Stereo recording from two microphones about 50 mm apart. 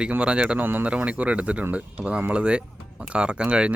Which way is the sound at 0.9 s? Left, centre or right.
Right.